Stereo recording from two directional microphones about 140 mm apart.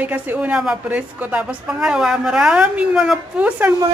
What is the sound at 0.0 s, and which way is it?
A woman's voice, 10° right (ahead or behind).